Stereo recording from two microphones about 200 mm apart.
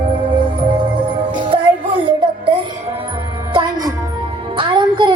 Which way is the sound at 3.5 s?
20° right (ahead or behind).